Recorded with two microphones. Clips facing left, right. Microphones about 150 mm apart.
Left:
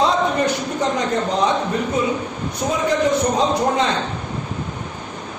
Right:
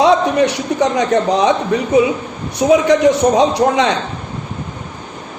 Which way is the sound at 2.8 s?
80° right.